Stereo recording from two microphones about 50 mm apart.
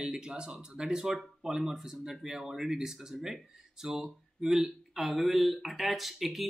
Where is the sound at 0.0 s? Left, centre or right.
Centre.